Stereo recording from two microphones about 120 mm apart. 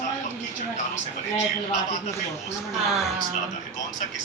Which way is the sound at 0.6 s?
70° left (ahead or behind).